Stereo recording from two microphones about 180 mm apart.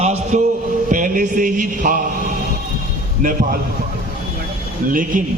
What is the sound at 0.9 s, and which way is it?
A man's voice, 50° right (ahead or behind).